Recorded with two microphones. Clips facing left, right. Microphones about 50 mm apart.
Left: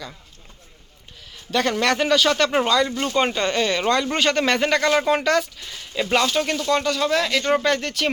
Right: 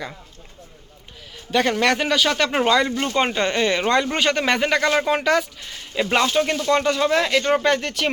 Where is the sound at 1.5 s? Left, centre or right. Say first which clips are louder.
Right 2 dB; centre.